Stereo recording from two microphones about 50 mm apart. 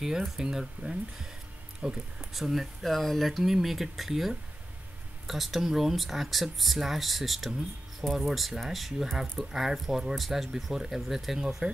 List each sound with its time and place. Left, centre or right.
0.0 s speech: centre
2.3 s speech: centre
2.8 s speech: centre